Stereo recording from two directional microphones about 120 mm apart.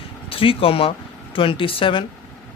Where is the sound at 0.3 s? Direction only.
50° left (ahead or behind).